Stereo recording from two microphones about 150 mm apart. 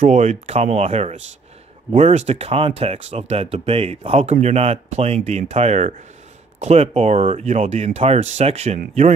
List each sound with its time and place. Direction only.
0.0 s speech: 50° right (ahead or behind)